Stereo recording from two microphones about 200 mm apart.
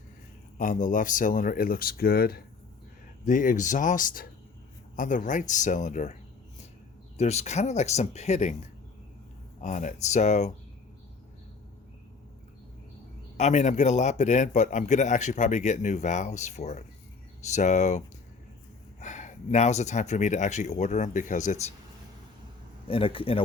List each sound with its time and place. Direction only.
0.6 s a man's voice: 40° left (ahead or behind)
7.2 s a man's voice: 35° left (ahead or behind)
9.6 s a man's voice: 40° left (ahead or behind)
13.3 s a man's voice: 35° left (ahead or behind)
22.9 s speech: 25° left (ahead or behind)